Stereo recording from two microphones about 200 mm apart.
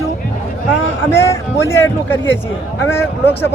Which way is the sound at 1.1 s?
15° left (ahead or behind).